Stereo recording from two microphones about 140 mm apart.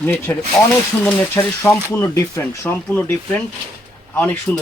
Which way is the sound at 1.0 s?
15° left (ahead or behind).